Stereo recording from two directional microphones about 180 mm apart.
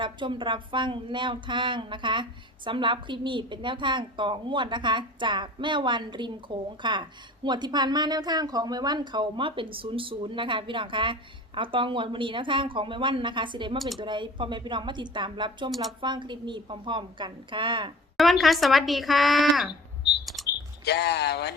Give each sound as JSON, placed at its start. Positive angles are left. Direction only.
{"t": 0.0, "sound": "a woman's voice", "side_deg": -25}
{"t": 18.2, "sound": "speech", "side_deg": 0}
{"t": 20.2, "sound": "bird", "side_deg": 0}
{"t": 20.8, "sound": "speech", "side_deg": 65}